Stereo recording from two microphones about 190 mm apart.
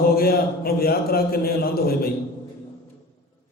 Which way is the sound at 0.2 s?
55° left (ahead or behind).